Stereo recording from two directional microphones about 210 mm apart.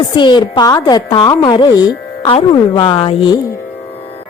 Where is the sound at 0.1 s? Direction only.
20° left (ahead or behind).